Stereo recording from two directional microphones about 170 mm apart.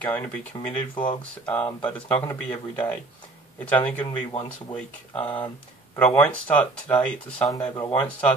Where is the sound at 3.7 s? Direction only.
10° left (ahead or behind).